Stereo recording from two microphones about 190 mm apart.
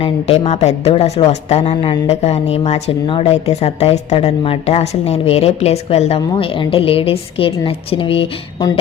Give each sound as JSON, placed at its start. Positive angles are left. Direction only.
{"t": 0.0, "sound": "speech", "side_deg": 35}